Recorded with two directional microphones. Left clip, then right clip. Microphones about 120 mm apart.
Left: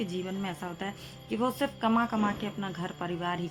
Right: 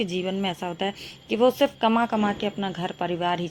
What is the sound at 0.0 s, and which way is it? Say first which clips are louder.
A woman's voice: right 8 dB; 30° right (ahead or behind).